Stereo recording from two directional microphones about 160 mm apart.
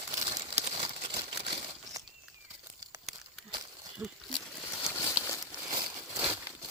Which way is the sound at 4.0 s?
Centre (ahead or behind).